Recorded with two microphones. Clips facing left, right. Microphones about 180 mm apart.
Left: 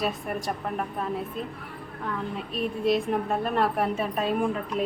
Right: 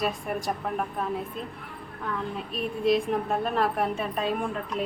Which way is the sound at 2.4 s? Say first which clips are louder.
Left 1 dB; centre (ahead or behind).